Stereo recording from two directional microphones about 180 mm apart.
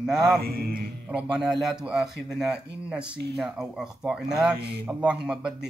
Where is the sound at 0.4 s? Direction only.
55° right (ahead or behind).